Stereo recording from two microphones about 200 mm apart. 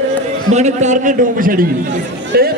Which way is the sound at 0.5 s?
35° right (ahead or behind).